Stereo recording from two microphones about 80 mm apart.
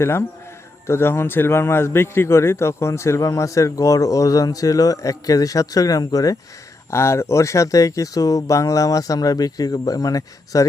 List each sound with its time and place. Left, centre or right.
0.0 s a man's voice: left
6.9 s a man's voice: left